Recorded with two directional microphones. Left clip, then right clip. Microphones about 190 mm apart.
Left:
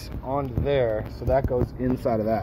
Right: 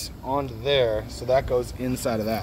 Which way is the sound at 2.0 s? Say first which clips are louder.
Left 2 dB; 20° right (ahead or behind).